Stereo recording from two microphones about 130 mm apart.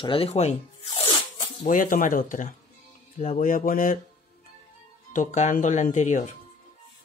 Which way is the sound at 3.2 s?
80° left.